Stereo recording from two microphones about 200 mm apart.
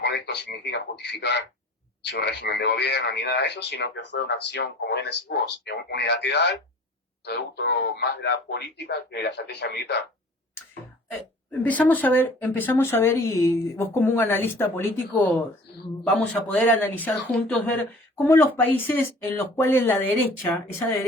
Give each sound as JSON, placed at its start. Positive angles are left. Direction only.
{"t": 0.0, "sound": "speech", "side_deg": 55}
{"t": 11.6, "sound": "speech", "side_deg": 10}